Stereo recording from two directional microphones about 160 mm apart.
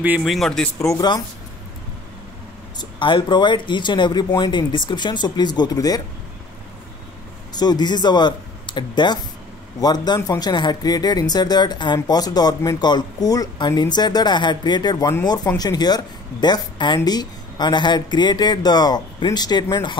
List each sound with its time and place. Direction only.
0.0 s speech: 10° right (ahead or behind)
0.3 s speech: 5° left (ahead or behind)
0.7 s speech: 20° left (ahead or behind)
2.8 s speech: 30° left (ahead or behind)
7.5 s speech: 25° left (ahead or behind)